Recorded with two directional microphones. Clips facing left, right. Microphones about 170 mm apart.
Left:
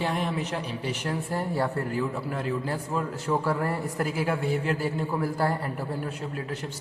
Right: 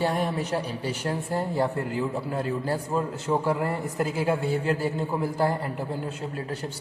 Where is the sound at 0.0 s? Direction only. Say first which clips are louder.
Right 2 dB; 40° right (ahead or behind).